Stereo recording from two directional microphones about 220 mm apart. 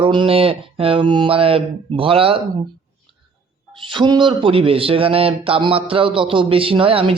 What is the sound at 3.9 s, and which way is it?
Speech, 20° right (ahead or behind).